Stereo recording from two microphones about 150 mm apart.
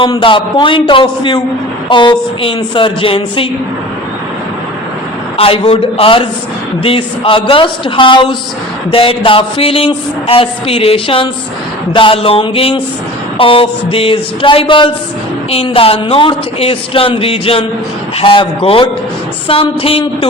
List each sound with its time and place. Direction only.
0.0 s speech: 35° left (ahead or behind)
5.4 s speech: 40° left (ahead or behind)